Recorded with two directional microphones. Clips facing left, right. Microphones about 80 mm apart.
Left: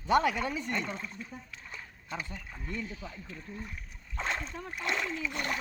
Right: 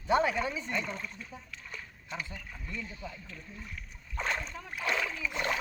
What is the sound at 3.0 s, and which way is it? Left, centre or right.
Speech, left.